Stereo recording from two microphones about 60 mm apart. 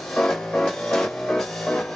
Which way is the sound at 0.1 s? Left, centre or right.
Centre.